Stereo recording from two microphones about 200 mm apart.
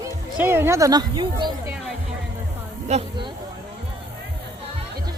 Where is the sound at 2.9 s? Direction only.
25° right (ahead or behind).